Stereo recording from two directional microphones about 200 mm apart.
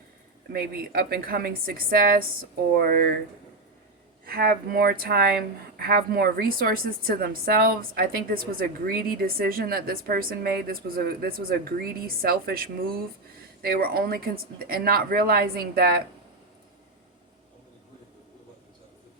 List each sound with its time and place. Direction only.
0.5 s a woman's voice: 50° right (ahead or behind)
4.3 s a woman's voice: 50° right (ahead or behind)